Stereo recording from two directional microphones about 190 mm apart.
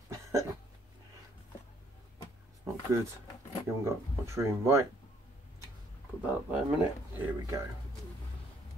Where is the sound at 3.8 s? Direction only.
15° right (ahead or behind).